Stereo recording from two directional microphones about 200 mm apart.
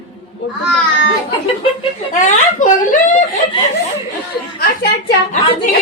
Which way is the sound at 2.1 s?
40° left (ahead or behind).